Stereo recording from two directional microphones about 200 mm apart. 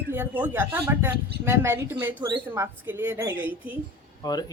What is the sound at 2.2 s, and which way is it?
Speech, 20° right (ahead or behind).